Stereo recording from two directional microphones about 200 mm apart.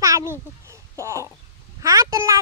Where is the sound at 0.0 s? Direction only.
15° right (ahead or behind).